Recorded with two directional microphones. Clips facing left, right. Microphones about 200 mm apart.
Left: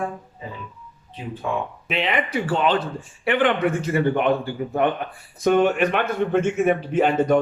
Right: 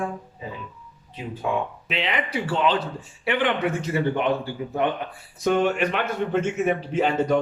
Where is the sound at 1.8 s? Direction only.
50° left (ahead or behind).